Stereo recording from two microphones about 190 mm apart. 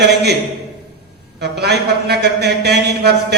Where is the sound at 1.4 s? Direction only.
60° right (ahead or behind).